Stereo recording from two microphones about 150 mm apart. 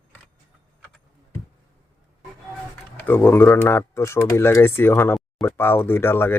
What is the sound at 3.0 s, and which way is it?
Speech, 15° left (ahead or behind).